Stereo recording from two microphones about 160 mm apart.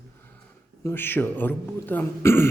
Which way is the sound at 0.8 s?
15° left (ahead or behind).